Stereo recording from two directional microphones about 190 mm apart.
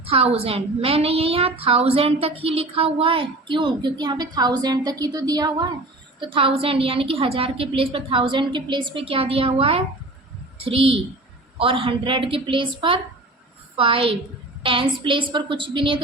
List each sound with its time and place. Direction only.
0.0 s a woman's voice: 30° right (ahead or behind)